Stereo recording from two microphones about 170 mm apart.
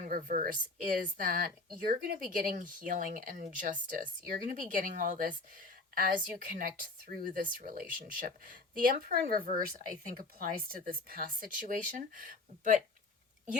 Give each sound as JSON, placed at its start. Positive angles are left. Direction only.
{"t": 0.1, "sound": "speech", "side_deg": -55}